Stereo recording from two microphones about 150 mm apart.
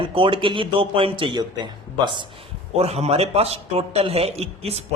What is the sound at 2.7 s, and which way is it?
A man's voice, 45° right (ahead or behind).